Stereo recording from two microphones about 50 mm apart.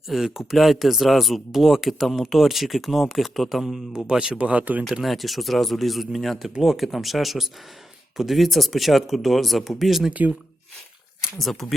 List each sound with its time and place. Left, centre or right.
0.1 s speech: centre
4.0 s speech: centre
4.9 s speech: centre
10.1 s speech: right
11.3 s speech: centre